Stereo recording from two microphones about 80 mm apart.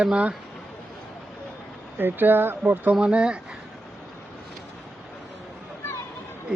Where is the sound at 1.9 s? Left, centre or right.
Right.